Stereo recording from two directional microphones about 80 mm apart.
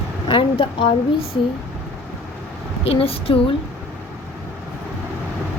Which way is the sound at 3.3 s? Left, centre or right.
Left.